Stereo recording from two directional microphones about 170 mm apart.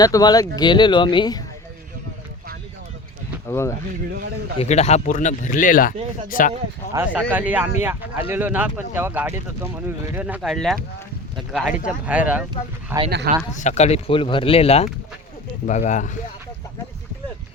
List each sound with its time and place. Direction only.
0.0 s speech: 25° left (ahead or behind)
3.4 s speech: 15° left (ahead or behind)
4.5 s speech: 40° left (ahead or behind); by 6.5 s 55° left (ahead or behind)
6.9 s speech: 10° right (ahead or behind)
11.3 s a sound: 5° right (ahead or behind)
12.0 s speech: 10° right (ahead or behind)
13.3 s speech: 60° right (ahead or behind)
13.6 s speech: 45° left (ahead or behind)